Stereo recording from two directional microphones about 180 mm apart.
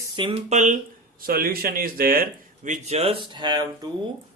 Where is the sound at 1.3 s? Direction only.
55° right (ahead or behind).